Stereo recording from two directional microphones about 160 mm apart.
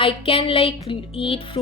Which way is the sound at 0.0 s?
35° left (ahead or behind).